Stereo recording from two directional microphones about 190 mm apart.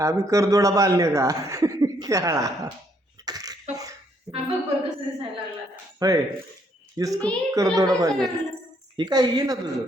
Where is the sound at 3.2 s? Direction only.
20° right (ahead or behind).